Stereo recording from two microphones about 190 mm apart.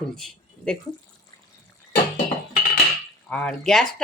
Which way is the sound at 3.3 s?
5° left (ahead or behind).